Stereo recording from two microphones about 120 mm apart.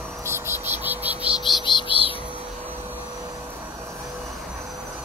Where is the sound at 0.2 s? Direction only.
20° right (ahead or behind).